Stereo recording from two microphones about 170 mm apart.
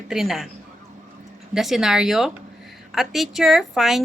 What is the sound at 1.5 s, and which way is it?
Speech, centre (ahead or behind).